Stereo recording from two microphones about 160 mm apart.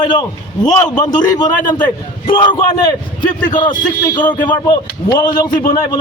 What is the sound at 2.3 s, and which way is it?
Speech, 25° left (ahead or behind).